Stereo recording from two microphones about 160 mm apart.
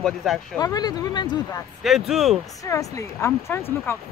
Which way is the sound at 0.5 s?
25° left (ahead or behind).